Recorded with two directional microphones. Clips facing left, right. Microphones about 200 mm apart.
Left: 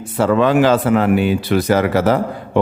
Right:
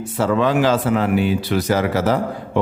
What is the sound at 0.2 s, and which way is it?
A man's voice, 60° left (ahead or behind).